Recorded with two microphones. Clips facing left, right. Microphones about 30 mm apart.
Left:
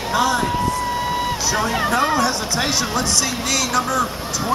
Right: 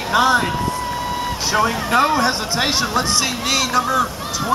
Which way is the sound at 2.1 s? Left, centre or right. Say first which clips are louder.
Right 1 dB; right.